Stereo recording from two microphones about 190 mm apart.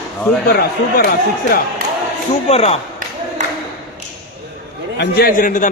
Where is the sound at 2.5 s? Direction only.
35° left (ahead or behind).